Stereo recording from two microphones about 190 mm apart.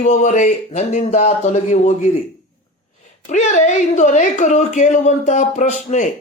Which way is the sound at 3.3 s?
40° left (ahead or behind).